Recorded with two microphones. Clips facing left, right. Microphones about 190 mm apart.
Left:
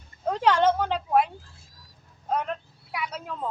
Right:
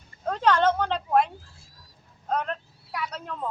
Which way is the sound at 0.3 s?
10° left (ahead or behind).